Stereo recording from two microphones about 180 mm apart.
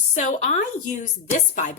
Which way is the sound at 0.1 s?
45° left (ahead or behind).